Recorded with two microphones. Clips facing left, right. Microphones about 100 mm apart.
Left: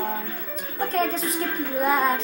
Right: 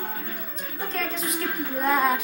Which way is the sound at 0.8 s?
50° left (ahead or behind).